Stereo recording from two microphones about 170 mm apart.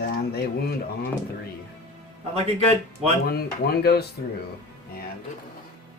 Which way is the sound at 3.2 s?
70° left (ahead or behind).